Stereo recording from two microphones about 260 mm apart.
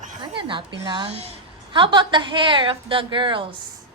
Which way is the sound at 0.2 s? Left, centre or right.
Centre.